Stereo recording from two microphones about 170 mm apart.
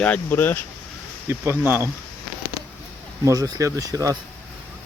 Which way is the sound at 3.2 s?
20° right (ahead or behind).